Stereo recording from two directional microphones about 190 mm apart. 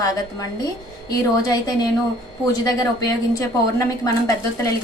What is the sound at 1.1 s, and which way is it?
A woman's voice, 20° left (ahead or behind).